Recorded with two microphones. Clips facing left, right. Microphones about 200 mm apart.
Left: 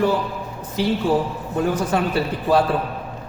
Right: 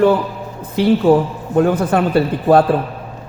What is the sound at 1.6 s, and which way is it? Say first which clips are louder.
A man's voice: right 6 dB; 55° right (ahead or behind).